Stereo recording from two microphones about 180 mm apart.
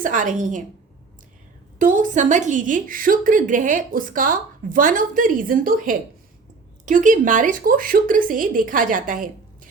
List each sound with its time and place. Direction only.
0.0 s a woman's voice: 45° right (ahead or behind)
1.8 s a woman's voice: 45° right (ahead or behind)